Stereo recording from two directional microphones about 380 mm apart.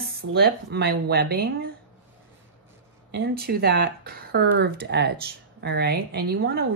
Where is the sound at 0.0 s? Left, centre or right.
Right.